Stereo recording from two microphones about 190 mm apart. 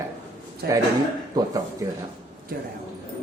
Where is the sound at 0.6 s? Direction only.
55° right (ahead or behind).